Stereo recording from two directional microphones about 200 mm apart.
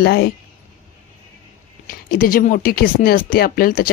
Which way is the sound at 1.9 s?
45° left (ahead or behind).